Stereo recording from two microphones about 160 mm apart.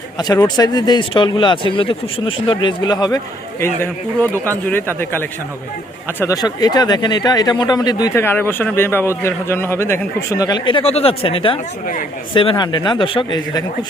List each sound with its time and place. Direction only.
0.2 s speech: 25° left (ahead or behind)
3.6 s a man's voice: 15° left (ahead or behind)